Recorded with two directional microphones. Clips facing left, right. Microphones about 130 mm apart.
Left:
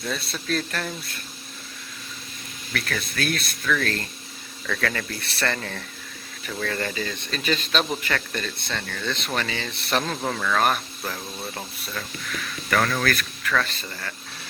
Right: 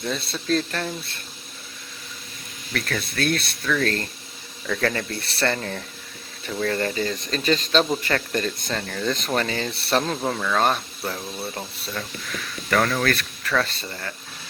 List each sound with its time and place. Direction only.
0.0 s speech: 25° right (ahead or behind)
2.7 s speech: 30° right (ahead or behind)
10.2 s speech: 15° right (ahead or behind)
10.6 s speech: 25° right (ahead or behind)
12.7 s speech: 25° right (ahead or behind)